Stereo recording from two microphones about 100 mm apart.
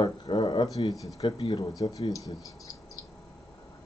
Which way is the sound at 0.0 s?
50° left (ahead or behind).